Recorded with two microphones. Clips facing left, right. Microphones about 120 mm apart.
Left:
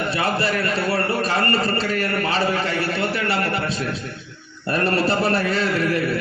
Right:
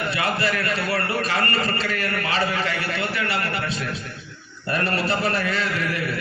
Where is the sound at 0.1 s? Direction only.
35° left (ahead or behind).